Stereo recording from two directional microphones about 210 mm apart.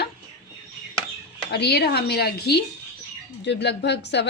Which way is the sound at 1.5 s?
50° left (ahead or behind).